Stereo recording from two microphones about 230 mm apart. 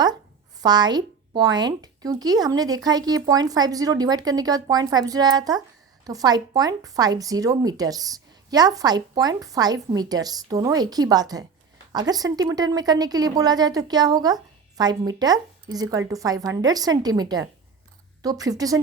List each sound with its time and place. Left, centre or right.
0.6 s speech: centre